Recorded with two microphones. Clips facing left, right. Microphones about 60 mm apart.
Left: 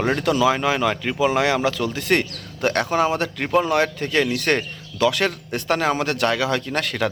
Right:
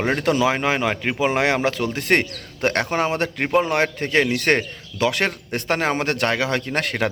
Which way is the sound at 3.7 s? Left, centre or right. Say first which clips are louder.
Even; right.